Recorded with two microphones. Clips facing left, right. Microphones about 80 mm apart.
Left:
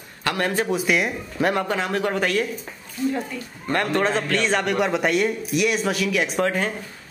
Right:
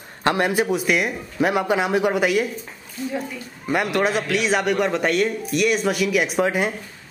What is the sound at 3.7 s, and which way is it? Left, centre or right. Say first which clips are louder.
A man's voice: right 1 dB; centre.